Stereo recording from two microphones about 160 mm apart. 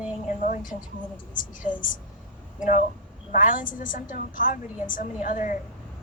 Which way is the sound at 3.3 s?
55° left (ahead or behind).